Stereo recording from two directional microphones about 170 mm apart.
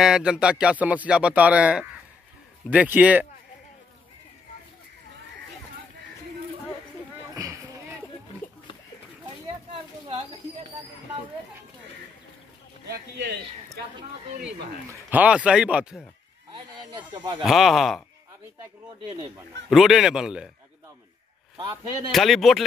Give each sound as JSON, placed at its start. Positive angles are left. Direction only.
{"t": 0.0, "sound": "speech", "side_deg": -5}
{"t": 7.3, "sound": "a sound", "side_deg": -20}
{"t": 10.0, "sound": "bird", "side_deg": -35}
{"t": 12.8, "sound": "a sound", "side_deg": -75}
{"t": 14.9, "sound": "speech", "side_deg": -10}
{"t": 16.5, "sound": "a sound", "side_deg": -25}
{"t": 17.4, "sound": "speech", "side_deg": 0}
{"t": 19.7, "sound": "speech", "side_deg": 0}
{"t": 22.1, "sound": "speech", "side_deg": 0}